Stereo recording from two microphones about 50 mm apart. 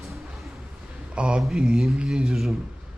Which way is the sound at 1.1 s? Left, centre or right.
Right.